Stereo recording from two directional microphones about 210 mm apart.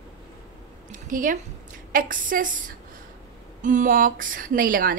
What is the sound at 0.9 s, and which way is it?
A woman's voice, 40° right (ahead or behind).